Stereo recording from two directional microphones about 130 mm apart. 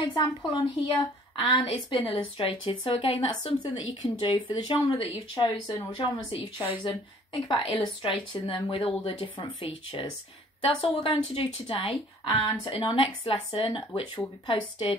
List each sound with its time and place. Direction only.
0.1 s speech: 35° left (ahead or behind)
7.4 s speech: 35° left (ahead or behind)